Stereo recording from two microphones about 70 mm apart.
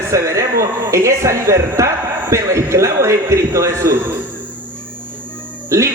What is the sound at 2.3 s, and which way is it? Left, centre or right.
A man's voice, right.